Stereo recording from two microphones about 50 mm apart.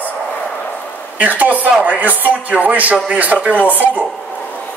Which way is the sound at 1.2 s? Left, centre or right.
Right.